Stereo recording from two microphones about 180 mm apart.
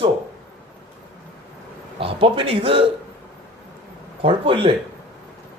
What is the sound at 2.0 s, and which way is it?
Speech, 30° right (ahead or behind).